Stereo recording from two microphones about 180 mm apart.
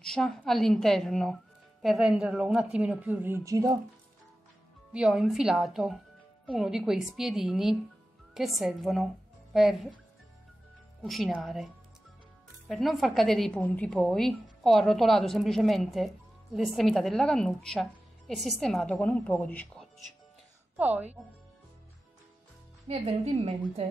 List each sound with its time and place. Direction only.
0.0 s a woman's voice: centre (ahead or behind); by 3.8 s 20° right (ahead or behind)
4.9 s a woman's voice: 5° right (ahead or behind)
11.0 s a woman's voice: centre (ahead or behind)
20.7 s speech: 10° right (ahead or behind)
22.8 s a woman's voice: 30° right (ahead or behind)